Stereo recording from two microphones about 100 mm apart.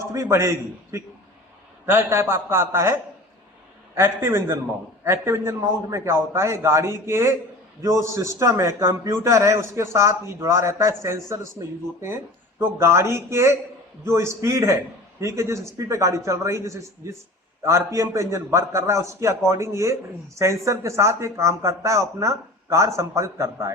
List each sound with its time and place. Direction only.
0.1 s a man's voice: 30° right (ahead or behind)